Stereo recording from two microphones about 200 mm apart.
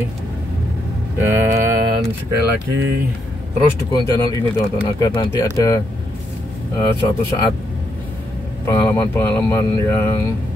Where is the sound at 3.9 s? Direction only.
20° left (ahead or behind).